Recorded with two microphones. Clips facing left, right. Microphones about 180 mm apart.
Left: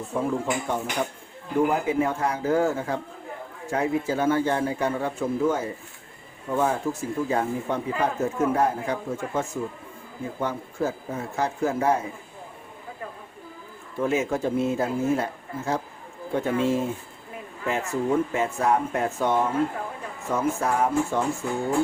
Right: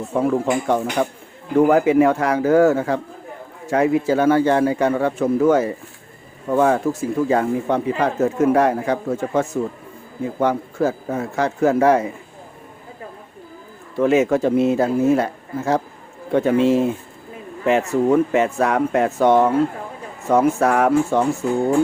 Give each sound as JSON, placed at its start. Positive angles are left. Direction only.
{"t": 0.2, "sound": "speech", "side_deg": -85}
{"t": 14.0, "sound": "speech", "side_deg": -80}